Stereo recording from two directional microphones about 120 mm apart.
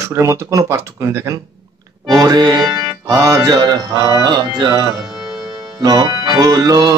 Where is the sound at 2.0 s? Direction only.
35° right (ahead or behind).